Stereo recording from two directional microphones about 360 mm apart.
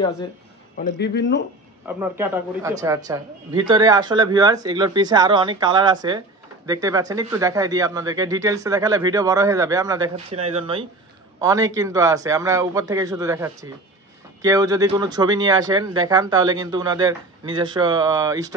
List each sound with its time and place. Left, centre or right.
0.9 s speech: left
1.9 s speech: centre